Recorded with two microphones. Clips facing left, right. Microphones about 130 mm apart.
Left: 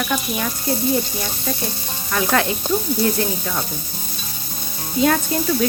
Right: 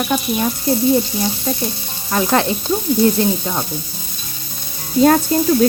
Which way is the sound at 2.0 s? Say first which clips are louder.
Right 3 dB; 30° right (ahead or behind).